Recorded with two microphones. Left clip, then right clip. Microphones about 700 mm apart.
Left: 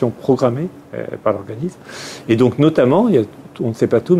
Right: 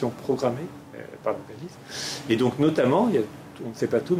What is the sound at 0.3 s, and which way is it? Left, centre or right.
Speech, left.